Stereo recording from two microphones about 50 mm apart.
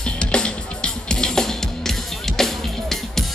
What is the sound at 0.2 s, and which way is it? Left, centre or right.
Music, centre.